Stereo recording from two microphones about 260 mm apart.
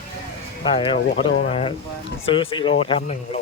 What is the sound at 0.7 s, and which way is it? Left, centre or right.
Speech, centre.